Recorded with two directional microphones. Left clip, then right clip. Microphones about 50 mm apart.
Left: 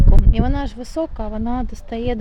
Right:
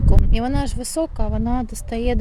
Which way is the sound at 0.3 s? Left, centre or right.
Right.